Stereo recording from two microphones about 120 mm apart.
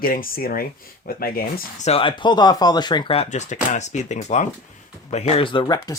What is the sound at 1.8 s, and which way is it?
Speech, 55° left (ahead or behind).